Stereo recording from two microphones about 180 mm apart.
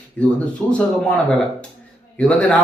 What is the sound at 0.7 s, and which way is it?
A man's voice, 5° left (ahead or behind).